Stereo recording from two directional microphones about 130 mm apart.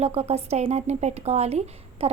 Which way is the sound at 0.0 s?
50° right (ahead or behind).